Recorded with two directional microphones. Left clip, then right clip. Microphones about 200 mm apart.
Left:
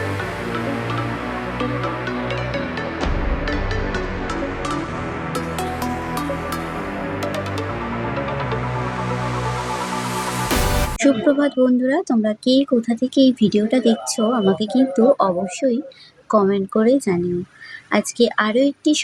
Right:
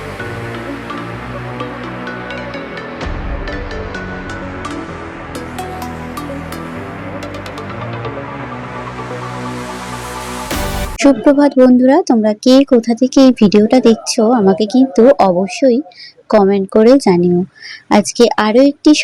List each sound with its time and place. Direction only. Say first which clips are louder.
11.0 s speech: right 8 dB; 30° right (ahead or behind)